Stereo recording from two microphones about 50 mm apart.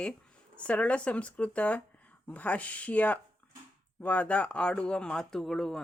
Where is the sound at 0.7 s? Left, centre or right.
Left.